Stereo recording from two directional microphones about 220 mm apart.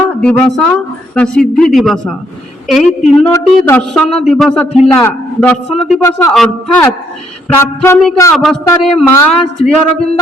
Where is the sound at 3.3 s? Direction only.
10° left (ahead or behind).